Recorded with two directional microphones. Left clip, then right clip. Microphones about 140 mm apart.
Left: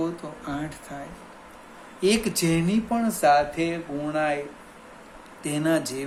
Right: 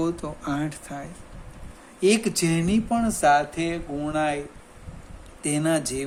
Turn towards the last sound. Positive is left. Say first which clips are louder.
# even
turn(degrees=-45)  # may be behind; listen again after turning